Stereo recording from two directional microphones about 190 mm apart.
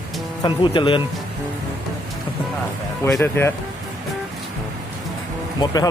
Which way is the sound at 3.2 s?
15° left (ahead or behind).